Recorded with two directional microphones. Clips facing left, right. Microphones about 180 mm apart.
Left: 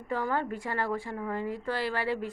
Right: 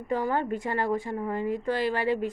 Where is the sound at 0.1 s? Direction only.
20° right (ahead or behind).